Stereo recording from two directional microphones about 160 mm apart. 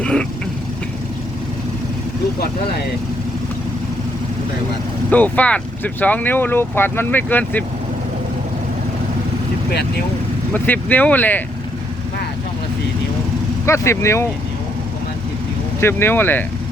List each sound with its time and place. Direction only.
0.0 s vehicle: 5° left (ahead or behind)
5.1 s speech: 10° left (ahead or behind)
10.5 s speech: 10° left (ahead or behind)
13.7 s speech: 15° left (ahead or behind)
15.8 s speech: 15° left (ahead or behind)